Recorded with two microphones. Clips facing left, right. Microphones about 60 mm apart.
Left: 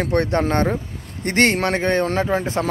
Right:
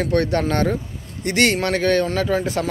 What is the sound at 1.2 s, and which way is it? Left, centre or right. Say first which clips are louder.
Speech: left 1 dB; left.